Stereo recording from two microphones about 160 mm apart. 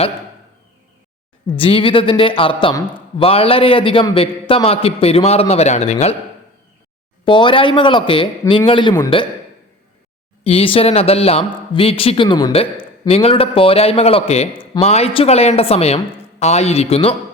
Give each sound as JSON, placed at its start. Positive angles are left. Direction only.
{"t": 1.5, "sound": "speech", "side_deg": 35}
{"t": 7.3, "sound": "speech", "side_deg": 30}
{"t": 10.4, "sound": "speech", "side_deg": 35}